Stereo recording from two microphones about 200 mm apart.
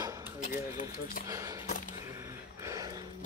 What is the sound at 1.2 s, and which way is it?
Speech, 15° right (ahead or behind).